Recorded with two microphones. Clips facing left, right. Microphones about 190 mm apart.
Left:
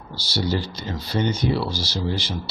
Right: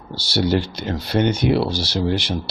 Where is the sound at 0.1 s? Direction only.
70° right (ahead or behind).